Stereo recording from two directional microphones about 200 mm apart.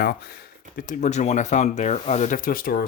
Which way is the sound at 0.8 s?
40° left (ahead or behind).